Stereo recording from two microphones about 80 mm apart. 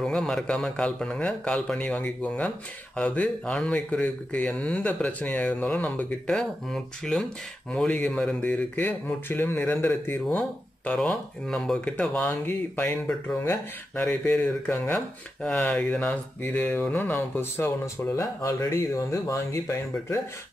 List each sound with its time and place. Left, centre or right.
0.0 s speech: centre
6.3 s speech: centre; by 10.4 s left
11.0 s speech: centre
13.4 s speech: left
14.0 s speech: centre; by 19.6 s left